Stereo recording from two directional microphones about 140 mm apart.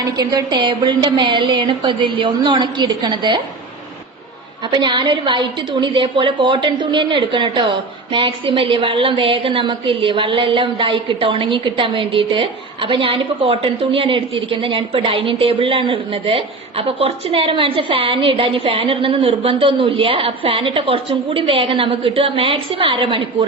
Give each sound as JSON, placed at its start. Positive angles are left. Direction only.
{"t": 0.0, "sound": "a woman's voice", "side_deg": -25}
{"t": 4.7, "sound": "a woman's voice", "side_deg": -35}